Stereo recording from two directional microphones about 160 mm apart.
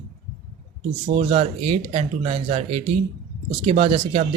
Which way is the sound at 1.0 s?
40° right (ahead or behind).